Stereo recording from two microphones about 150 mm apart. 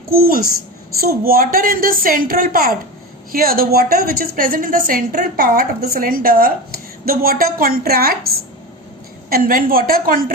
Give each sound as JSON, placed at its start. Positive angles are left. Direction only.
{"t": 0.1, "sound": "a child's voice", "side_deg": -80}
{"t": 9.3, "sound": "a woman's voice", "side_deg": -70}